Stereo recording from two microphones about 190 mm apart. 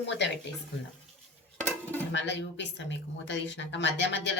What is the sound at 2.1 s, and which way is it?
A woman's voice, 65° left (ahead or behind).